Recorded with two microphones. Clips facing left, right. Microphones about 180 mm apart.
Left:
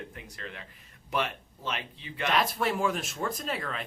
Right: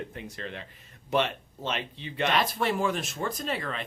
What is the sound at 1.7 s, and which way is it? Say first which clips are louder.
Speech: right 3 dB; 25° right (ahead or behind).